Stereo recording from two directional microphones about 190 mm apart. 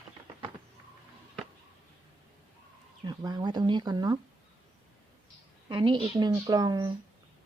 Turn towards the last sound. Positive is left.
turn(degrees=-20)  # may be behind; listen again after turning